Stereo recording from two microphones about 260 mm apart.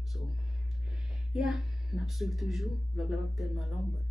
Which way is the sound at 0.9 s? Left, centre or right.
Centre.